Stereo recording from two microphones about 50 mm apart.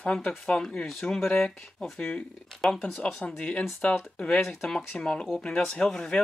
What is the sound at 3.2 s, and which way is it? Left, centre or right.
Speech, left.